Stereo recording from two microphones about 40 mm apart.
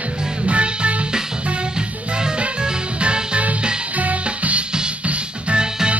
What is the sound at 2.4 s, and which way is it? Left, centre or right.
Music, right.